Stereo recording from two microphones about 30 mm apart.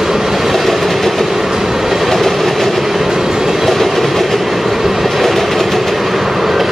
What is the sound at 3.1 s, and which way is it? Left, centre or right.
Train, centre.